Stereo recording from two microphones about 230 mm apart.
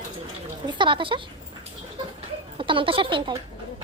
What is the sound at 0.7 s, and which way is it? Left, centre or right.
Speech, right.